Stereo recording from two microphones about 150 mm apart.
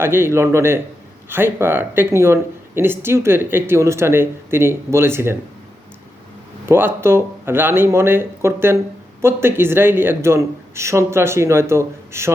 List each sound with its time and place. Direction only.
0.0 s speech: 15° right (ahead or behind)
6.7 s speech: 15° right (ahead or behind)